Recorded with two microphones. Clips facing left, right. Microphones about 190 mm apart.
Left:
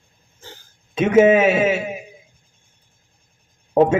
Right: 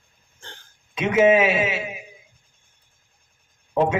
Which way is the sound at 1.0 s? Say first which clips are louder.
Left 4 dB; 50° left (ahead or behind).